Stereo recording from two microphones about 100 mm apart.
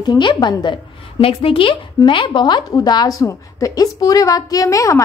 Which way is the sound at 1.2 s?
65° left (ahead or behind).